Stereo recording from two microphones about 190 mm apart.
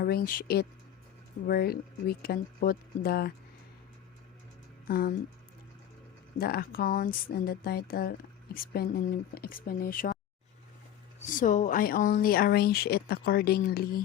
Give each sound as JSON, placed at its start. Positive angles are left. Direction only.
{"t": 0.0, "sound": "speech", "side_deg": 50}
{"t": 4.9, "sound": "speech", "side_deg": 50}
{"t": 6.4, "sound": "speech", "side_deg": 55}
{"t": 11.3, "sound": "speech", "side_deg": 45}